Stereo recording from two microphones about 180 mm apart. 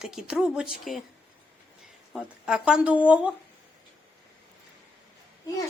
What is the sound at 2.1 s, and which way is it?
Speech, 5° right (ahead or behind).